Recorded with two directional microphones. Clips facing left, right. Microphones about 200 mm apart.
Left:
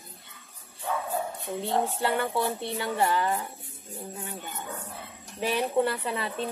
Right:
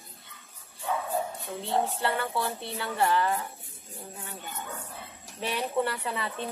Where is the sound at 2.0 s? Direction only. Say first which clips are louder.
Left 3 dB; 20° left (ahead or behind).